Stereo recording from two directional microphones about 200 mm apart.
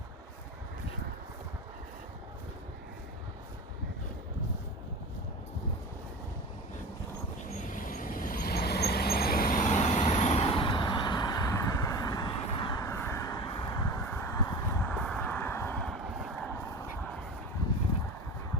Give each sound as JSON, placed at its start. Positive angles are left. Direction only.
{"t": 7.7, "sound": "vehicle", "side_deg": 45}